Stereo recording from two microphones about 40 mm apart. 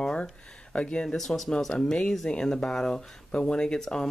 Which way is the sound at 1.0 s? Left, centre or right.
Centre.